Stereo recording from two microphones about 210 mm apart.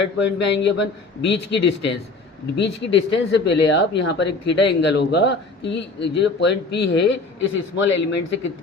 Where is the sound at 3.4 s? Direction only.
55° left (ahead or behind).